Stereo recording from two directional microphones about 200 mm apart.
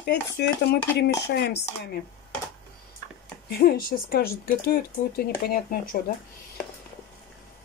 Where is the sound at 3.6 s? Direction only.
50° left (ahead or behind).